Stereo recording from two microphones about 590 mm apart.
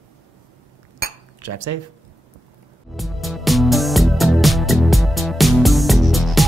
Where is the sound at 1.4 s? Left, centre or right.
Right.